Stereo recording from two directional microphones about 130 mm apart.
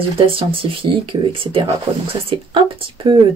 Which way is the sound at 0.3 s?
45° right (ahead or behind).